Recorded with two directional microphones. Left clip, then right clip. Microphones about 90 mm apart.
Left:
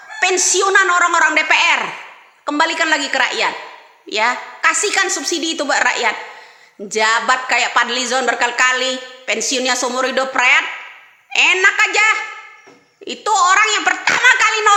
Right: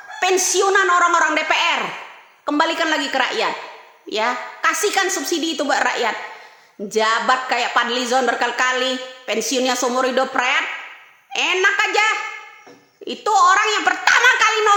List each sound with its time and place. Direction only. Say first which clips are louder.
0.2 s a woman's voice: left 2 dB; 40° right (ahead or behind)